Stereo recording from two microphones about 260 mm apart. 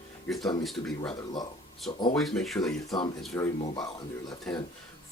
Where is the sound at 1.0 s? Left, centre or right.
Centre.